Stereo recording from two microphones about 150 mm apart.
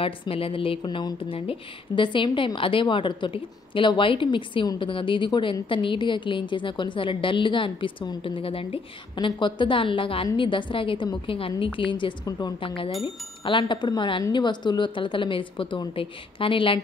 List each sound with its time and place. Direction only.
0.0 s a woman's voice: 40° left (ahead or behind)